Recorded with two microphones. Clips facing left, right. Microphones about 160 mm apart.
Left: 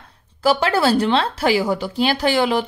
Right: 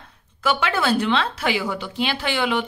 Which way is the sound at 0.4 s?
35° left (ahead or behind).